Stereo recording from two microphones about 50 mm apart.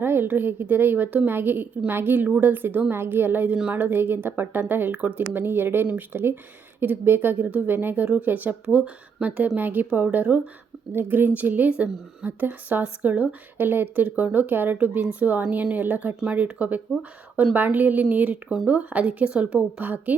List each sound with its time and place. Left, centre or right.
0.0 s a woman's voice: right
18.4 s speech: centre
18.7 s a woman's voice: right